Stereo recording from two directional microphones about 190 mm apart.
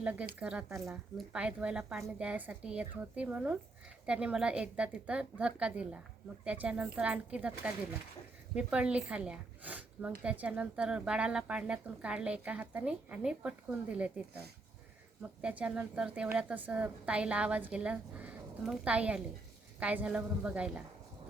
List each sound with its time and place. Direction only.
0.0 s a woman's voice: 5° right (ahead or behind)
15.2 s a woman's voice: 5° right (ahead or behind)